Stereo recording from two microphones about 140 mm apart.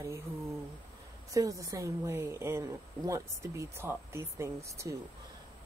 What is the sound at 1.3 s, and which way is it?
Speech, 25° right (ahead or behind).